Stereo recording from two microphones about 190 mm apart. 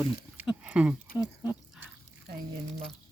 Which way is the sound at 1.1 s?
10° right (ahead or behind).